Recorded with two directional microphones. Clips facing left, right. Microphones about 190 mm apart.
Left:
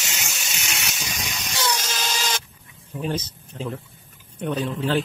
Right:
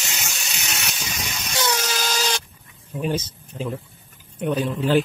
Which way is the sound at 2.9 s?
10° right (ahead or behind).